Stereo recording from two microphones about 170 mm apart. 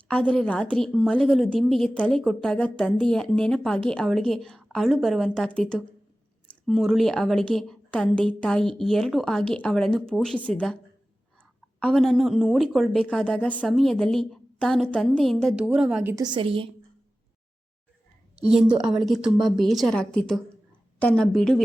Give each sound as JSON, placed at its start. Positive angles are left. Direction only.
{"t": 0.1, "sound": "a woman's voice", "side_deg": 5}
{"t": 11.8, "sound": "a woman's voice", "side_deg": 0}
{"t": 16.1, "sound": "a woman's voice", "side_deg": -25}
{"t": 18.3, "sound": "a woman's voice", "side_deg": -5}